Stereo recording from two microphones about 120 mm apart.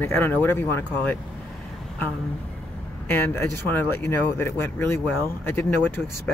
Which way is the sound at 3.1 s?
20° left (ahead or behind).